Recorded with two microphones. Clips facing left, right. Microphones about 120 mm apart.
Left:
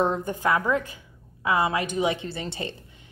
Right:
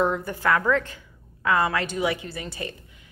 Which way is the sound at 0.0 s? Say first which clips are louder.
Even; 20° left (ahead or behind).